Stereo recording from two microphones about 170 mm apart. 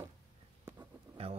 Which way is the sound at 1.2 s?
35° right (ahead or behind).